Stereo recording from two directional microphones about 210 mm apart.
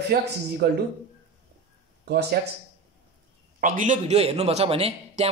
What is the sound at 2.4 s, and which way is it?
Speech, 50° right (ahead or behind).